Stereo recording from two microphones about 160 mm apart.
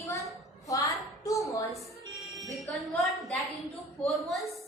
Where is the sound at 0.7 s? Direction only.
20° left (ahead or behind).